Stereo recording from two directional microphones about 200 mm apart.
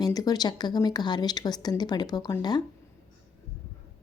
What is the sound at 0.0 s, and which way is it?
Speech, 20° left (ahead or behind).